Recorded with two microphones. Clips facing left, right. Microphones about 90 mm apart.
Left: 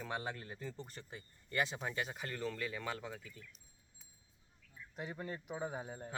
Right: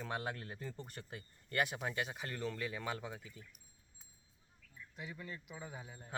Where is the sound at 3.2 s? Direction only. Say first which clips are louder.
Even; 25° right (ahead or behind).